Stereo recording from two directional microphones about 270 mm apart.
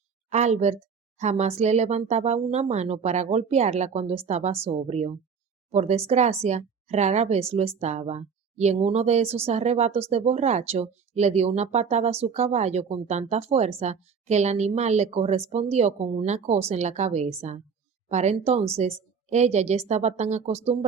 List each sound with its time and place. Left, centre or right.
0.3 s a woman's voice: right